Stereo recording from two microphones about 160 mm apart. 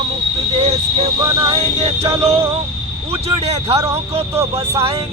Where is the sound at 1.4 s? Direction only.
35° right (ahead or behind).